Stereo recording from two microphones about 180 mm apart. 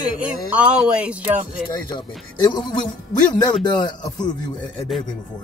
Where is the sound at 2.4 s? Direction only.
25° left (ahead or behind).